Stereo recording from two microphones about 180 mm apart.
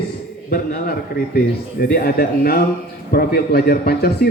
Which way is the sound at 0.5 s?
60° left (ahead or behind).